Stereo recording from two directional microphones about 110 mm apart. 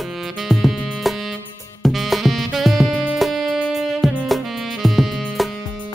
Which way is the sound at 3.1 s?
5° right (ahead or behind).